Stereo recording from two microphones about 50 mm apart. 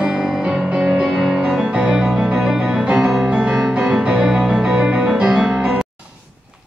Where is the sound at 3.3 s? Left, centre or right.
Centre.